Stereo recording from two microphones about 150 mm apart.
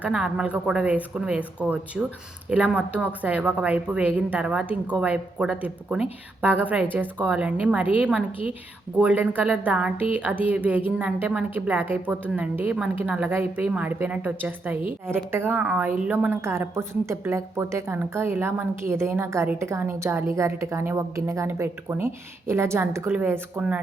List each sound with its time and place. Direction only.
0.0 s a woman's voice: 5° right (ahead or behind)